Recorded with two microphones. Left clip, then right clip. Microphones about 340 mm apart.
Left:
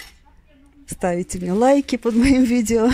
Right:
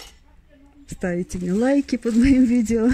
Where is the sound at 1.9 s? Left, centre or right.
Left.